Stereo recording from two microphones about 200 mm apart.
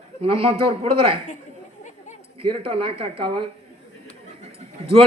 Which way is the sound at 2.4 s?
25° right (ahead or behind).